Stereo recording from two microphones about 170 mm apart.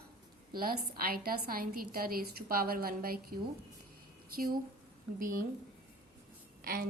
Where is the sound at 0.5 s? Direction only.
60° right (ahead or behind).